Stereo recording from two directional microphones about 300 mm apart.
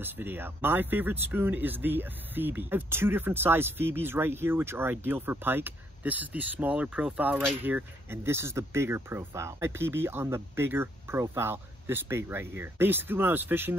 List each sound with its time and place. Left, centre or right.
0.0 s speech: centre